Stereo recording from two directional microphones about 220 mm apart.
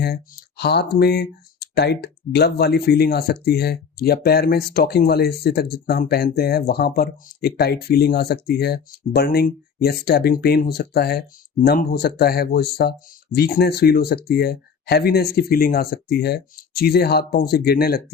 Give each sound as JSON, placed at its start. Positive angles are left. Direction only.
{"t": 0.0, "sound": "speech", "side_deg": 45}